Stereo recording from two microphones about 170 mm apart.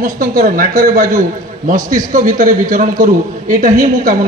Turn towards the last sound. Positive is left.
turn(degrees=-55)  # may be behind; listen again after turning